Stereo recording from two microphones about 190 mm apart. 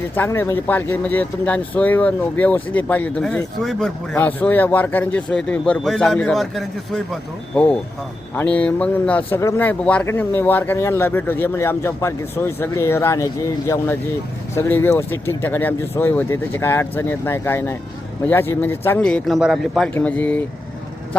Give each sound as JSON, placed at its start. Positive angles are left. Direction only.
{"t": 0.1, "sound": "speech", "side_deg": 10}